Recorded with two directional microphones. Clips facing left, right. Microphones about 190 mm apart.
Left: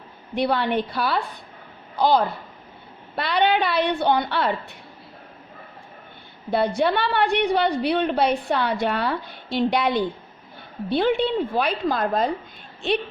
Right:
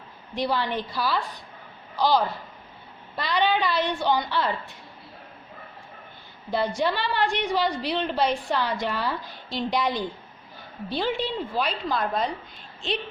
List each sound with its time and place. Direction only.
0.3 s a woman's voice: 60° left (ahead or behind)
6.5 s a woman's voice: 60° left (ahead or behind)